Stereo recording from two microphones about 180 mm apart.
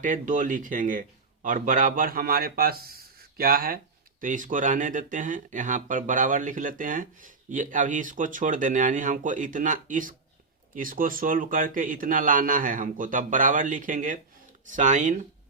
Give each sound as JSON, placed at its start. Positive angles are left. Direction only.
{"t": 0.0, "sound": "speech", "side_deg": -45}